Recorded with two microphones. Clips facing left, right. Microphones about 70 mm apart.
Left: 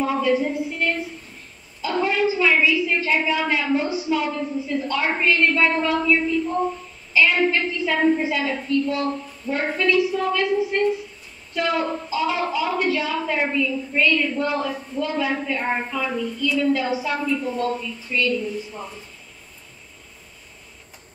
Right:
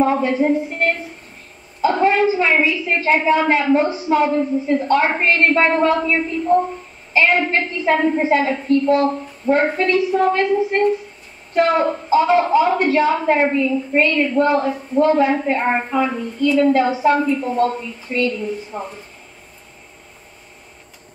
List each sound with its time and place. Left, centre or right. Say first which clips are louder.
0.0 s a woman's voice: right 4 dB; right